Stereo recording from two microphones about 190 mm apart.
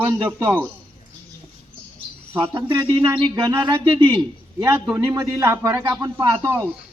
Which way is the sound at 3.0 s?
25° right (ahead or behind).